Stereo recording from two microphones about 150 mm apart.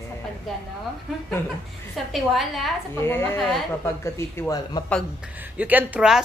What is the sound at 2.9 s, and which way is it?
A woman's voice, 15° left (ahead or behind).